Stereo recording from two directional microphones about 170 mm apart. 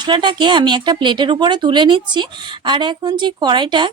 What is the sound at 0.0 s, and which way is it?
Speech, 25° right (ahead or behind).